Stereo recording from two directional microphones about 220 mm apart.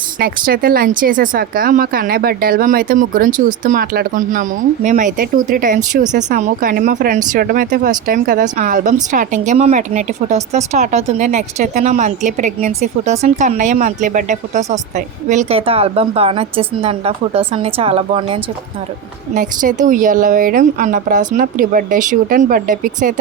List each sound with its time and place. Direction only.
0.2 s speech: 40° right (ahead or behind)
19.3 s speech: 35° right (ahead or behind)